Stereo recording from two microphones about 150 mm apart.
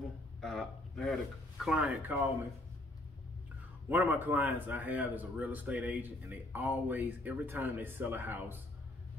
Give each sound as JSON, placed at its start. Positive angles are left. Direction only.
{"t": 0.4, "sound": "speech", "side_deg": 5}
{"t": 3.9, "sound": "speech", "side_deg": -10}